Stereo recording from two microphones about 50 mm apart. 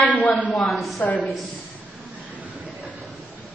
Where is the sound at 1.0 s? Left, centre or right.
Left.